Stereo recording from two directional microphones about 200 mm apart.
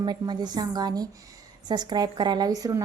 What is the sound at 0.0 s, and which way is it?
Speech, 20° right (ahead or behind).